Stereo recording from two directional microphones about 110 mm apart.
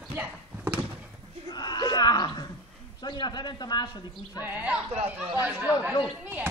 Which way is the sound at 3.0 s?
40° left (ahead or behind).